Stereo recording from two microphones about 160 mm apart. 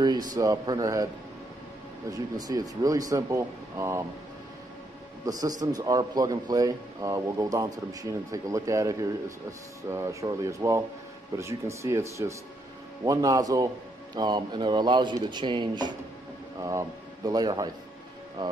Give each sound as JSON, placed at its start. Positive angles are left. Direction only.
{"t": 0.0, "sound": "a man's voice", "side_deg": -25}
{"t": 2.0, "sound": "a man's voice", "side_deg": -25}
{"t": 5.2, "sound": "a man's voice", "side_deg": -20}